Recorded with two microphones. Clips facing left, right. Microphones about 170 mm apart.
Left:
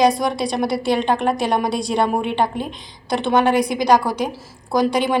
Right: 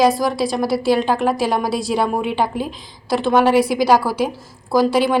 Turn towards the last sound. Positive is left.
turn(degrees=-5)  # may be behind; listen again after turning